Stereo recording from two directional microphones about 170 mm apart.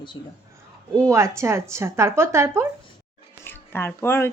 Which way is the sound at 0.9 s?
15° right (ahead or behind).